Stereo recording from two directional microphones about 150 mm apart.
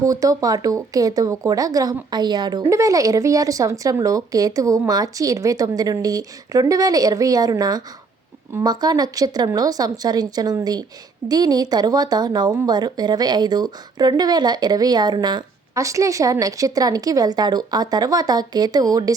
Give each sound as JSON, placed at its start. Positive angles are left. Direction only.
{"t": 0.0, "sound": "a woman's voice", "side_deg": -25}